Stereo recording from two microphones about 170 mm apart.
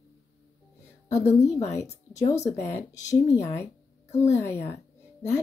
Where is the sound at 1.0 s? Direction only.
40° left (ahead or behind).